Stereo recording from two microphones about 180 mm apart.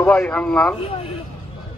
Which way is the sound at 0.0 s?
5° left (ahead or behind).